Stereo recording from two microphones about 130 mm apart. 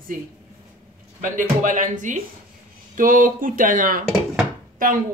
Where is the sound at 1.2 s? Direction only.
90° right.